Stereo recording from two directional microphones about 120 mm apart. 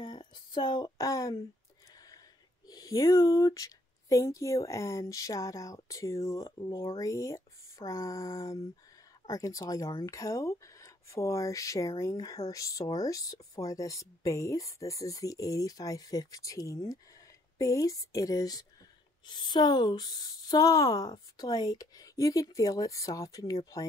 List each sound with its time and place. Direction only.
0.0 s speech: 40° left (ahead or behind)
2.7 s speech: 30° left (ahead or behind)